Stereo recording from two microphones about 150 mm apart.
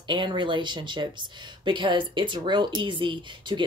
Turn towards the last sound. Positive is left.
turn(degrees=-30)  # may be behind; listen again after turning